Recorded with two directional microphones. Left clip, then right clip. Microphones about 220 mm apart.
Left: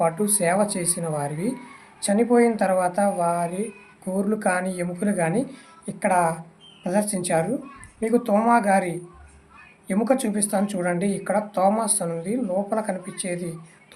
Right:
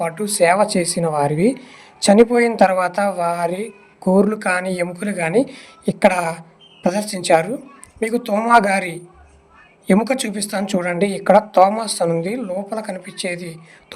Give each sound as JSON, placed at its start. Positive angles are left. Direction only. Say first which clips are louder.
{"t": 0.0, "sound": "speech", "louder": "right 5 dB", "side_deg": -35}